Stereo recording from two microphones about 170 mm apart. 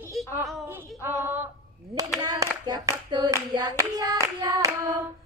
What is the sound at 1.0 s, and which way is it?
Female singing, 15° right (ahead or behind).